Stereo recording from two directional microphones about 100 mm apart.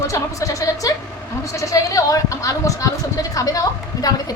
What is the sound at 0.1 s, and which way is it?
A woman's voice, 30° left (ahead or behind).